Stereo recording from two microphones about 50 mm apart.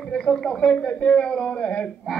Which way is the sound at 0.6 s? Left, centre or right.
Left.